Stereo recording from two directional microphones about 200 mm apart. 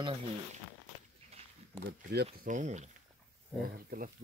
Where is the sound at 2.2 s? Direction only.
40° right (ahead or behind).